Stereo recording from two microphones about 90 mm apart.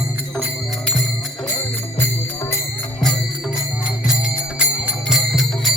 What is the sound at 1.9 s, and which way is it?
Jingle bell, 30° left (ahead or behind).